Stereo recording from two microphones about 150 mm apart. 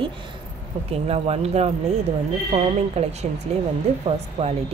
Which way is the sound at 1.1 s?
45° right (ahead or behind).